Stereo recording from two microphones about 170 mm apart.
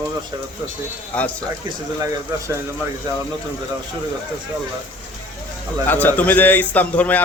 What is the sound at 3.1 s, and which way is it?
Speech, 25° right (ahead or behind).